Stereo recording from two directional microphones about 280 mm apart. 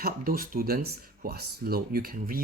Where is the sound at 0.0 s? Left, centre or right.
Right.